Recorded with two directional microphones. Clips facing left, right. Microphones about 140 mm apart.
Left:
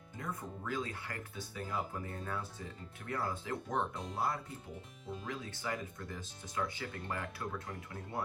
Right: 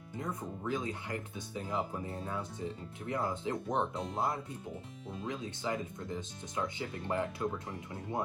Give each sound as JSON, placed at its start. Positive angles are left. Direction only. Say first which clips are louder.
{"t": 0.2, "sound": "speech", "louder": "right 3 dB", "side_deg": -20}